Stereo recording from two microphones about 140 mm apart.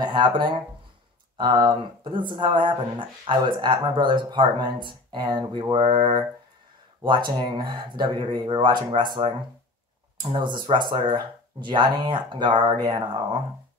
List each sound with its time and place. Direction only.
0.0 s speech: 35° right (ahead or behind)